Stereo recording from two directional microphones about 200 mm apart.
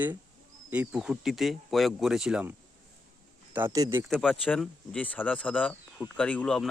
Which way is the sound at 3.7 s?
20° right (ahead or behind).